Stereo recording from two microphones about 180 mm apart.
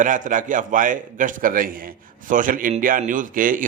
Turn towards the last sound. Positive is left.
turn(degrees=-50)  # may be behind; listen again after turning